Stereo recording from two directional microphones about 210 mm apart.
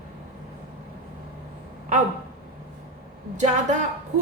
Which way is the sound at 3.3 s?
35° right (ahead or behind).